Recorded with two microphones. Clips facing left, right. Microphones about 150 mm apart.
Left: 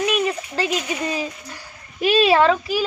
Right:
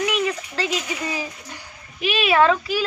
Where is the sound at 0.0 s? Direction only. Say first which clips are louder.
Left 2 dB; 20° left (ahead or behind).